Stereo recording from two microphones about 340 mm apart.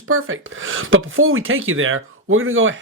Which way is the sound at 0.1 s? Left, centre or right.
Right.